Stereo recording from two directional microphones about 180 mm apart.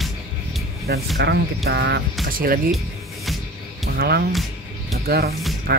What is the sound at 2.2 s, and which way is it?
Speech, 55° right (ahead or behind).